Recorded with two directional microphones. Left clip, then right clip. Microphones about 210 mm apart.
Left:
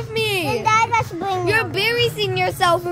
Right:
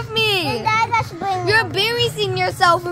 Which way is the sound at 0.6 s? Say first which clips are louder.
Left 2 dB; 20° left (ahead or behind).